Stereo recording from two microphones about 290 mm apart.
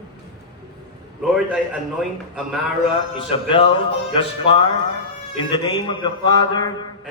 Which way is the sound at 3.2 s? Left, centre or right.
Centre.